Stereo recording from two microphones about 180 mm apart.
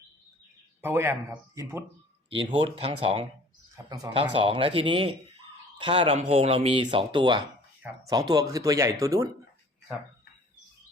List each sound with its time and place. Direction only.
0.8 s speech: 10° right (ahead or behind)
2.5 s speech: 35° right (ahead or behind)
3.8 s speech: 20° right (ahead or behind)